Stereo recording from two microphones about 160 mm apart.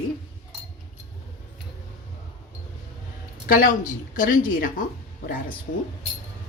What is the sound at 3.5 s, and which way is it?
Speech, 60° left (ahead or behind).